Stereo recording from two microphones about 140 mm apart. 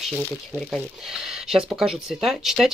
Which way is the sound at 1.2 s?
5° right (ahead or behind).